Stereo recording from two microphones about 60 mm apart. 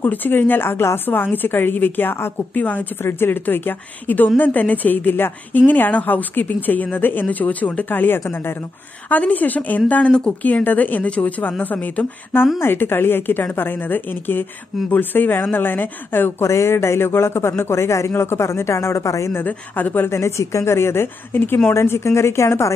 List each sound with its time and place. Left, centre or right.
0.0 s a woman's voice: left
0.7 s a woman's voice: left
2.5 s a woman's voice: left
3.0 s a woman's voice: left
12.5 s a woman's voice: left
16.4 s speech: left
19.3 s a woman's voice: left
20.1 s speech: left
21.7 s speech: left